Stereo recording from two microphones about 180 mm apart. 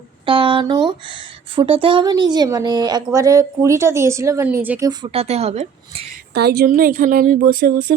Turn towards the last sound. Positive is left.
turn(degrees=-55)  # may be behind; listen again after turning